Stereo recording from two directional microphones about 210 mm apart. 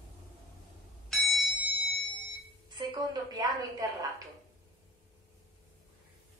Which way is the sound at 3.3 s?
20° right (ahead or behind).